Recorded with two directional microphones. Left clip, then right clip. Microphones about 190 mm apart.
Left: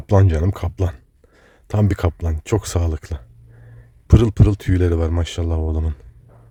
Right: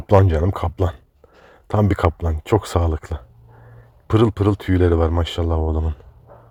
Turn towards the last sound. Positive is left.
turn(degrees=15)  # may be behind; listen again after turning